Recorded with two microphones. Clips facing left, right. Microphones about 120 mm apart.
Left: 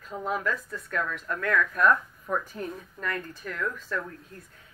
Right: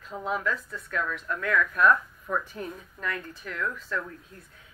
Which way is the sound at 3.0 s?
45° left (ahead or behind).